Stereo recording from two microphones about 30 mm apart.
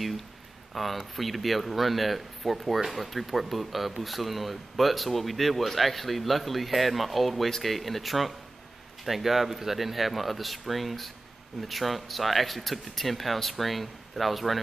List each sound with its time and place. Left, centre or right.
0.7 s speech: centre